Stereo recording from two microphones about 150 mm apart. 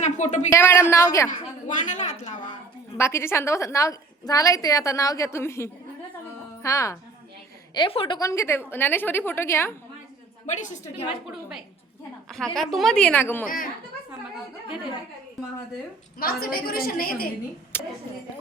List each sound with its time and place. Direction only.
0.0 s speech: 50° left (ahead or behind)
0.5 s a woman's voice: 15° left (ahead or behind)
1.3 s a woman's voice: 55° left (ahead or behind)
3.0 s a woman's voice: 15° left (ahead or behind)
7.7 s a woman's voice: 35° left (ahead or behind)
8.3 s a woman's voice: 20° left (ahead or behind)
10.4 s a woman's voice: 55° left (ahead or behind)
12.5 s a woman's voice: centre (ahead or behind)
16.1 s a woman's voice: 80° left
17.7 s a woman's voice: 15° left (ahead or behind)